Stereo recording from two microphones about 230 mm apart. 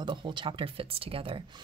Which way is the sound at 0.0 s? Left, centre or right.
Right.